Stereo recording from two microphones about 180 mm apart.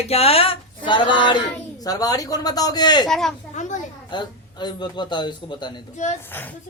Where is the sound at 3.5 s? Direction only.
45° left (ahead or behind).